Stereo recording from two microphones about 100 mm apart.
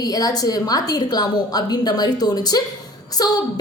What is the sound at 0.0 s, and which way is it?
A woman's voice, 40° left (ahead or behind).